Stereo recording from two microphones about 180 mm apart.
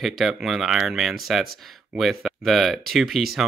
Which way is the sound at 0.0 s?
Centre (ahead or behind).